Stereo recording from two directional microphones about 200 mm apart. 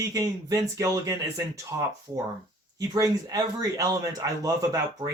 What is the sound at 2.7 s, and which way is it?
Speech, 20° right (ahead or behind).